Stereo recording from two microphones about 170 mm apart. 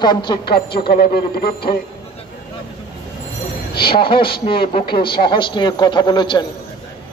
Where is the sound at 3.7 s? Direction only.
30° left (ahead or behind).